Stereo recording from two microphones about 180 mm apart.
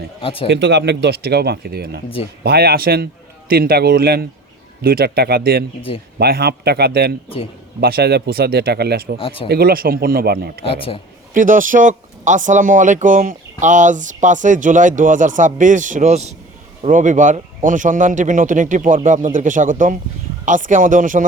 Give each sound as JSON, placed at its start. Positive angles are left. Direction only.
{"t": 0.2, "sound": "a man's voice", "side_deg": 30}
{"t": 0.4, "sound": "speech", "side_deg": -70}
{"t": 9.1, "sound": "a man's voice", "side_deg": 30}
{"t": 9.5, "sound": "speech", "side_deg": -55}
{"t": 10.6, "sound": "a man's voice", "side_deg": 30}
{"t": 11.3, "sound": "speech", "side_deg": -50}